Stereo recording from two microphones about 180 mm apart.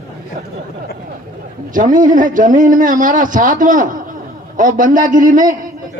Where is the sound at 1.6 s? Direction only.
50° right (ahead or behind).